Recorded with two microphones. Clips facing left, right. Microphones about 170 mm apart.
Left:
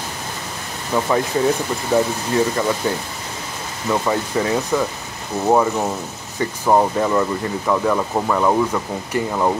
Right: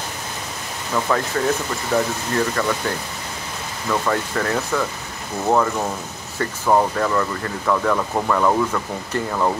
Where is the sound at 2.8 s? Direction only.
15° left (ahead or behind).